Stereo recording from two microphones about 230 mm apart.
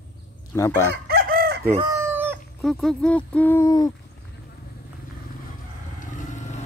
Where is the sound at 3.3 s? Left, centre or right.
Centre.